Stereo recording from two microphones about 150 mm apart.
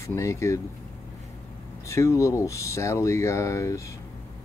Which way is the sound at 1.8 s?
20° left (ahead or behind).